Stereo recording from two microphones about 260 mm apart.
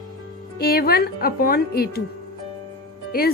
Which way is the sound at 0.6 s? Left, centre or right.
Left.